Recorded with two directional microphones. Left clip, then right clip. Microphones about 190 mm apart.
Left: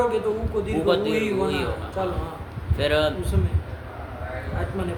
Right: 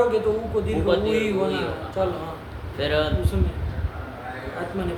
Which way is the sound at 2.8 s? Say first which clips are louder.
Left 2 dB; 35° left (ahead or behind).